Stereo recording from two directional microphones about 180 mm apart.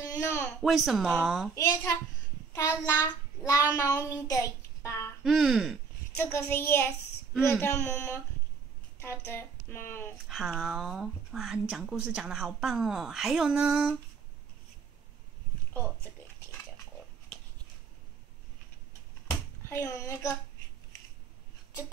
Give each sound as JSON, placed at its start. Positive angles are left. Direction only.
{"t": 0.0, "sound": "a sound", "side_deg": 15}
{"t": 0.6, "sound": "speech", "side_deg": 0}
{"t": 1.5, "sound": "a child's voice", "side_deg": 20}
{"t": 2.5, "sound": "child singing", "side_deg": 20}
{"t": 5.2, "sound": "speech", "side_deg": 0}
{"t": 6.1, "sound": "speech", "side_deg": 15}
{"t": 10.2, "sound": "speech", "side_deg": 0}
{"t": 19.8, "sound": "speech", "side_deg": 15}